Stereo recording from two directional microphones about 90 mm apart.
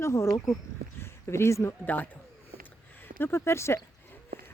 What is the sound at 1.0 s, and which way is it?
Speech, 30° left (ahead or behind).